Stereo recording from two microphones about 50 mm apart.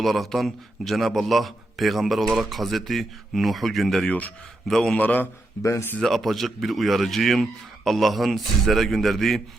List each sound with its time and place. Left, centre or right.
0.0 s a man's voice: centre
4.9 s a man's voice: left
5.6 s speech: left
6.0 s a man's voice: centre